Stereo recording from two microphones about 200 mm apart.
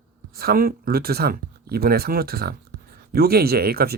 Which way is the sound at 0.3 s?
50° right (ahead or behind).